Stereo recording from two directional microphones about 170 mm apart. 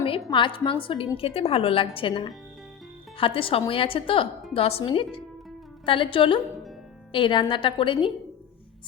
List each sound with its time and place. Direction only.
0.0 s a woman's voice: 30° left (ahead or behind)